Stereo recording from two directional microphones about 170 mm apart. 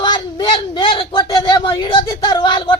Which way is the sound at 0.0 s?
25° left (ahead or behind).